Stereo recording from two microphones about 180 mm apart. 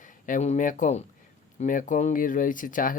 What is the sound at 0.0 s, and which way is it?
Speech, 45° left (ahead or behind).